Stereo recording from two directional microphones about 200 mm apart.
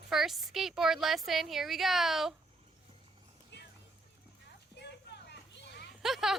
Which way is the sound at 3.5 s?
60° left (ahead or behind).